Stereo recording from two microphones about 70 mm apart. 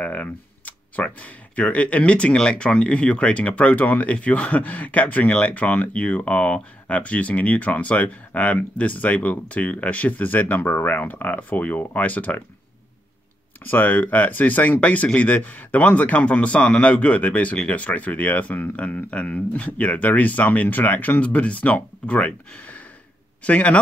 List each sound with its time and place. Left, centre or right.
0.0 s speech: left
13.7 s speech: left